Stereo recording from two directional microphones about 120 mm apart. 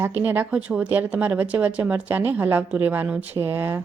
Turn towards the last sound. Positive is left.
turn(degrees=-20)  # may be behind; listen again after turning